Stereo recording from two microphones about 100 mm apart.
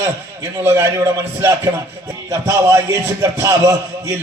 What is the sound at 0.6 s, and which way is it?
A man's voice, 25° right (ahead or behind).